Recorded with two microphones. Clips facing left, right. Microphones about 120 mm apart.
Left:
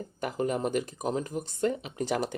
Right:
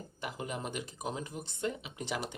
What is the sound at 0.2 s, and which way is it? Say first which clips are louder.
Speech: left 10 dB; 50° left (ahead or behind).